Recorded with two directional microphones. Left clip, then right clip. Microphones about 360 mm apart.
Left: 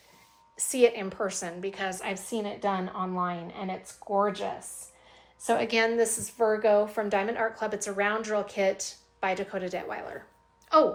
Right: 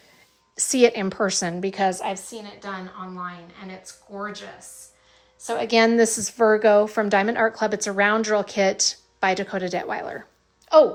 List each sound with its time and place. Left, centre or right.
0.5 s a woman's voice: right; by 4.4 s centre
5.4 s a woman's voice: centre
6.0 s a woman's voice: right
10.7 s a woman's voice: centre